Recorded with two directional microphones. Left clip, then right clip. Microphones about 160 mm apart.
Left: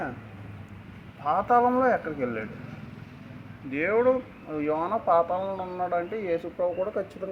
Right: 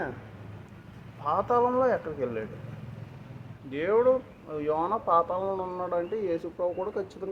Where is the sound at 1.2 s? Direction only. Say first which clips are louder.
Left 3 dB; centre (ahead or behind).